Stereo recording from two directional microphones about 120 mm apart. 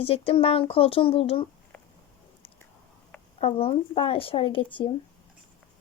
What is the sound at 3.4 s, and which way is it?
Speech, 55° left (ahead or behind).